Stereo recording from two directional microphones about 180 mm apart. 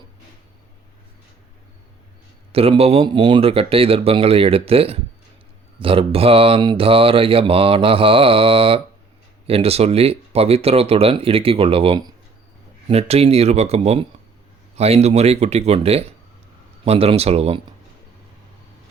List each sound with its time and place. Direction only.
2.5 s mantra: 35° right (ahead or behind)